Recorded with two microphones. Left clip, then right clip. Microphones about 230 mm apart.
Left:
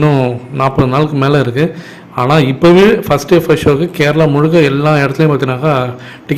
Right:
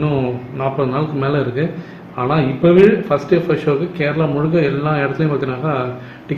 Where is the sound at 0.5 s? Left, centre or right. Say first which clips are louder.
Left 7 dB; left.